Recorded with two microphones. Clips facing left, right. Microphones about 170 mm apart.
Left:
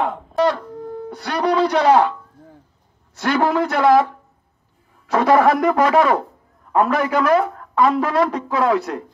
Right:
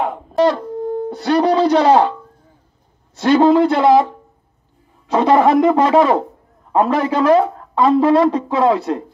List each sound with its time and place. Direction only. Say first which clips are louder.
0.4 s wind instrument: right 4 dB; 25° right (ahead or behind)
1.1 s speech: right 4 dB; 25° right (ahead or behind)
3.2 s speech: right 7 dB; 25° right (ahead or behind)
5.1 s speech: right 2 dB; 25° right (ahead or behind)